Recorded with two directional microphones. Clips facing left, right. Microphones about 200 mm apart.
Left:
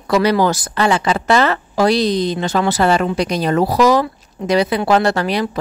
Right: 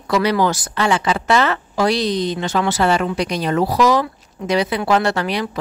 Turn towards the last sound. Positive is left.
turn(degrees=40)  # may be behind; listen again after turning